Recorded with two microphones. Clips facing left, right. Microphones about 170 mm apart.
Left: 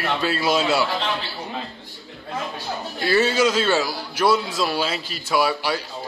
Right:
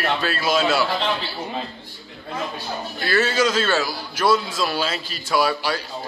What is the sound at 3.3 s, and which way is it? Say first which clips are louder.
A man's voice: left 1 dB; 10° left (ahead or behind).